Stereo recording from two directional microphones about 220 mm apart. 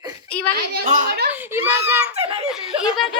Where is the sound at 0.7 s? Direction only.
35° right (ahead or behind).